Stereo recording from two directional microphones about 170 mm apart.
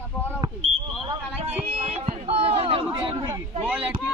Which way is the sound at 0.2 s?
10° left (ahead or behind).